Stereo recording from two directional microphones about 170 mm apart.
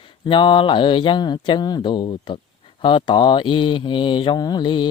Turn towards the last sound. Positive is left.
turn(degrees=25)  # may be behind; listen again after turning